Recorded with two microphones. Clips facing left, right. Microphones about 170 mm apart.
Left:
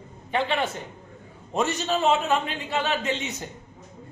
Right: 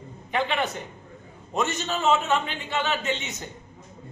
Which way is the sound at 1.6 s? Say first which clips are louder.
Left 2 dB; 35° left (ahead or behind).